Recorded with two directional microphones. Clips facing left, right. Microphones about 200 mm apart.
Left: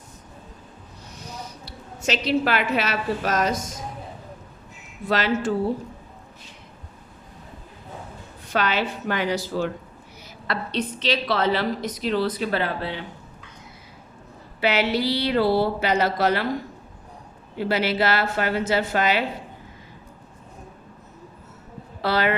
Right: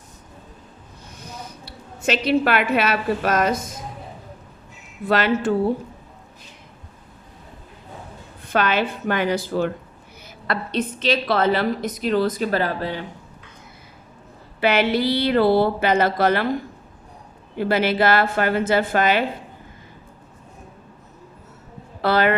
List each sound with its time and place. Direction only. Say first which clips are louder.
1.2 s a woman's voice: even; 55° right (ahead or behind)
5.0 s speech: right 3 dB; 55° right (ahead or behind)
8.4 s a woman's voice: right 3 dB; 55° right (ahead or behind)
14.6 s a woman's voice: right 3 dB; 55° right (ahead or behind)
17.6 s a woman's voice: right 3 dB; 50° right (ahead or behind)
22.0 s a woman's voice: right 4 dB; 50° right (ahead or behind)